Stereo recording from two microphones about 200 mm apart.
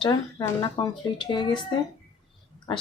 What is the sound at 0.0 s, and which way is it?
Speech, 15° left (ahead or behind).